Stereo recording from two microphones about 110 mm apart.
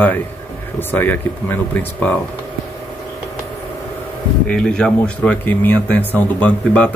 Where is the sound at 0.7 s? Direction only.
20° left (ahead or behind).